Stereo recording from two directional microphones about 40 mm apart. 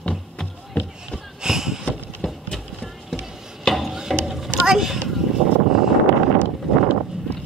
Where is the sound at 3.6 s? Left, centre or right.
Centre.